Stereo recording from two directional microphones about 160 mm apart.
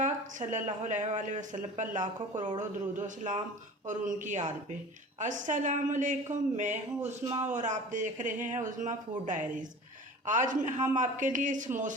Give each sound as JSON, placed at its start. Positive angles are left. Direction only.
{"t": 0.0, "sound": "speech", "side_deg": -50}